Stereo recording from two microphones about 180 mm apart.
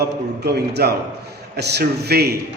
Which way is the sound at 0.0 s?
65° right (ahead or behind).